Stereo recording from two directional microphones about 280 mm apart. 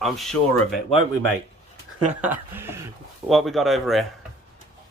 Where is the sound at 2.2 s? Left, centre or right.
Centre.